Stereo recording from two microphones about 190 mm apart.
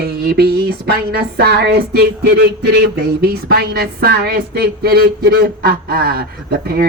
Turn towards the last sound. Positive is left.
turn(degrees=-55)  # may be behind; listen again after turning